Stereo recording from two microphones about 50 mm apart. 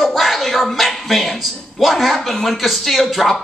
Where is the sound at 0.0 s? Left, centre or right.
Centre.